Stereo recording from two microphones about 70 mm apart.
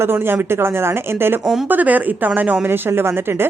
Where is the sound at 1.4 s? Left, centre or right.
Centre.